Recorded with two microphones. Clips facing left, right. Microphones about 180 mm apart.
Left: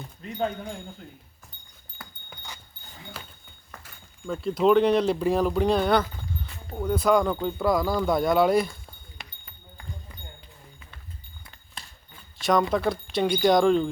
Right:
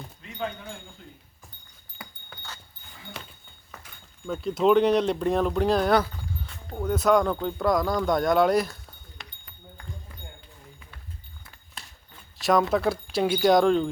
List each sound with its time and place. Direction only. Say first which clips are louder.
0.2 s speech: left 5 dB; 40° left (ahead or behind)
2.3 s a sound: left 1 dB; 15° left (ahead or behind)
3.8 s speech: even; centre (ahead or behind)
12.4 s speech: right 1 dB; centre (ahead or behind)